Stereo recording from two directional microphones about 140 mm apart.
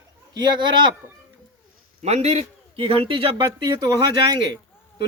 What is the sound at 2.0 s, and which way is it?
Speech, 50° right (ahead or behind).